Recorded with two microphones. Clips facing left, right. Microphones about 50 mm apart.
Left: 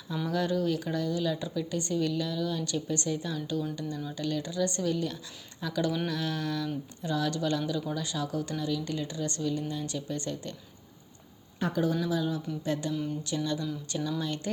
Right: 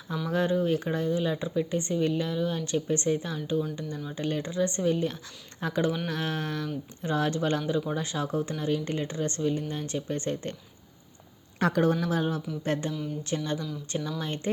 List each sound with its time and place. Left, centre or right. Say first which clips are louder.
0.3 s speech: right 3 dB; right
11.6 s speech: right 4 dB; right
12.9 s speech: left 1 dB; centre
13.2 s speech: even; right